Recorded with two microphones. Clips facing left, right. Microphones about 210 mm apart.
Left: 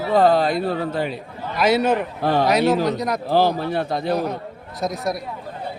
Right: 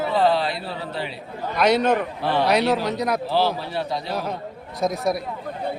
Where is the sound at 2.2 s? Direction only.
45° left (ahead or behind).